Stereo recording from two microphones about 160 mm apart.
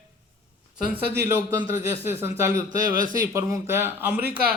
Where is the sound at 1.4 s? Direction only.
15° right (ahead or behind).